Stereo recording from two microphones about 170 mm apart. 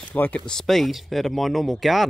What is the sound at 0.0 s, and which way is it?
Speech, 10° left (ahead or behind).